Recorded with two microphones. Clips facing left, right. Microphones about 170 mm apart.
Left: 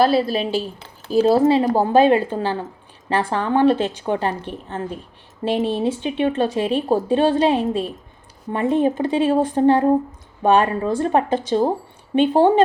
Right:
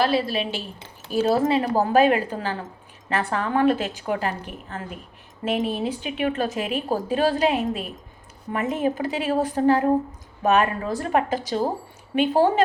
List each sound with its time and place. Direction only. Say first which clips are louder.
0.0 s a woman's voice: left 5 dB; 35° left (ahead or behind)